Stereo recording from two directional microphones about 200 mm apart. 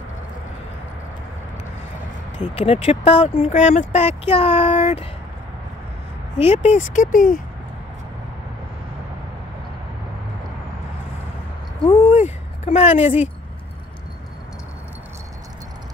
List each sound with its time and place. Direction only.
2.5 s speech: 30° left (ahead or behind)
6.3 s speech: 35° left (ahead or behind)
12.1 s a sound: 35° left (ahead or behind)